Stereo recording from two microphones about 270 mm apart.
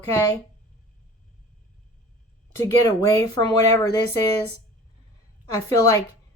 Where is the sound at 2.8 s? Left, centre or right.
Centre.